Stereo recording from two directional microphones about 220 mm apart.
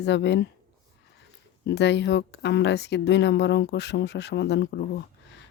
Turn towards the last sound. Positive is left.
turn(degrees=50)  # may be behind; listen again after turning